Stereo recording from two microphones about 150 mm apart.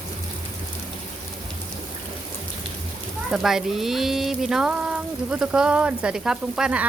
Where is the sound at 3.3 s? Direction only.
5° right (ahead or behind).